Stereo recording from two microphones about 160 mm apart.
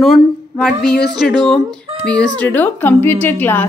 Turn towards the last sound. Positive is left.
turn(degrees=10)  # may be behind; listen again after turning